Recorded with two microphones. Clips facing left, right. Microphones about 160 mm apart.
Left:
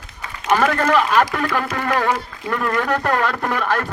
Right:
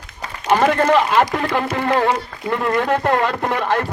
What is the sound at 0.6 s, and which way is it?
A man's voice, 20° right (ahead or behind).